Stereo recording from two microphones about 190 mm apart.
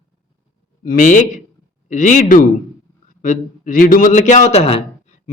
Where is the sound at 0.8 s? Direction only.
40° left (ahead or behind).